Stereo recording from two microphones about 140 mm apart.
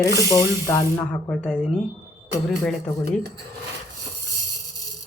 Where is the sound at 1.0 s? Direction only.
10° left (ahead or behind).